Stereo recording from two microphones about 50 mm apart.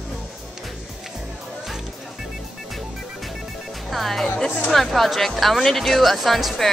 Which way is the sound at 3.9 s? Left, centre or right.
Centre.